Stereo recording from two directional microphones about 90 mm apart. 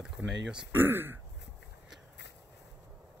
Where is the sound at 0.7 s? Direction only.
25° right (ahead or behind).